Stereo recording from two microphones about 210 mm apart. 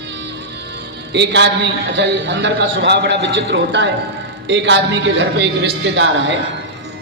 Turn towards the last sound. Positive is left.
turn(degrees=-60)  # may be behind; listen again after turning